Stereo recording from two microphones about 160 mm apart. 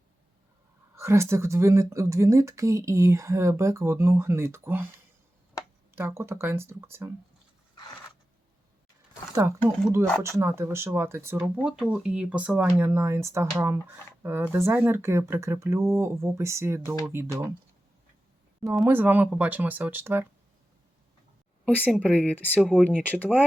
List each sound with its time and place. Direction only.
0.9 s speech: 15° right (ahead or behind)
5.9 s speech: 15° right (ahead or behind)
9.3 s speech: 15° right (ahead or behind)
18.9 s speech: 10° right (ahead or behind)
21.6 s a woman's voice: 10° left (ahead or behind)